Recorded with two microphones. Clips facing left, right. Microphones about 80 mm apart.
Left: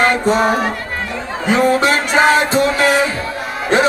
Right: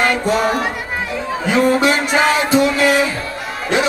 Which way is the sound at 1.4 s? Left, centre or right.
Left.